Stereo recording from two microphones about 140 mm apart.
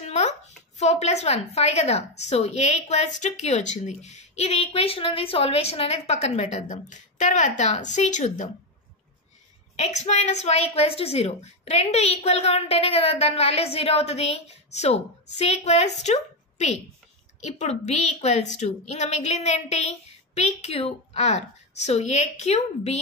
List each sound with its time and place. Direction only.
0.0 s speech: 55° left (ahead or behind)
9.8 s speech: 55° left (ahead or behind)